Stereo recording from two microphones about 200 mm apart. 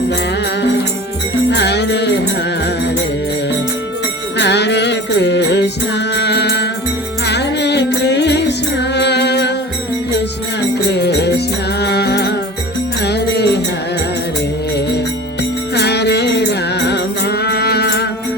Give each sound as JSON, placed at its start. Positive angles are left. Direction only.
{"t": 1.5, "sound": "music", "side_deg": 60}
{"t": 4.4, "sound": "music", "side_deg": 60}
{"t": 10.8, "sound": "music", "side_deg": 55}
{"t": 14.8, "sound": "music", "side_deg": 55}